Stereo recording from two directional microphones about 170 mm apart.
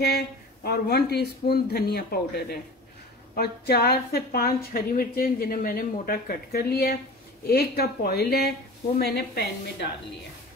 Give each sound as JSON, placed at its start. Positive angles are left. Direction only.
{"t": 0.7, "sound": "speech", "side_deg": 70}